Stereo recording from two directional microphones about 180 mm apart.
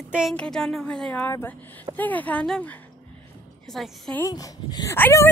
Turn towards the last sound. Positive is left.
turn(degrees=10)  # may be behind; listen again after turning